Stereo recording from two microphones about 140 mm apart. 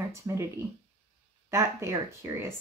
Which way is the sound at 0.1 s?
20° right (ahead or behind).